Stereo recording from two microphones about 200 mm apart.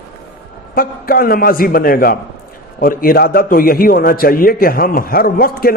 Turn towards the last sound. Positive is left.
turn(degrees=50)  # may be behind; listen again after turning